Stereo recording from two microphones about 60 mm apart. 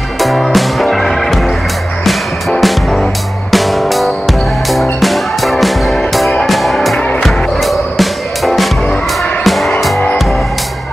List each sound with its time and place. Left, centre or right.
0.2 s music: centre
2.6 s music: centre